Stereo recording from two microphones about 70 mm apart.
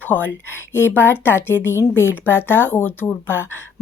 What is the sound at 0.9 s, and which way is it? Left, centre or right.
A woman's voice, left.